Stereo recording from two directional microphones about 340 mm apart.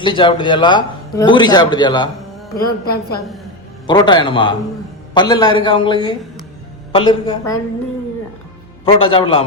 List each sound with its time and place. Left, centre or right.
0.0 s a man's voice: centre
2.6 s a woman's voice: left
3.2 s a woman's voice: centre
3.8 s a man's voice: centre
8.8 s a man's voice: centre